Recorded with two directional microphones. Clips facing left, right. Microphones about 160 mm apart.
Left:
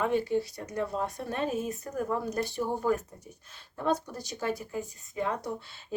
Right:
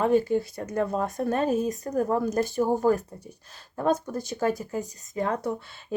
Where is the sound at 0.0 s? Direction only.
40° right (ahead or behind).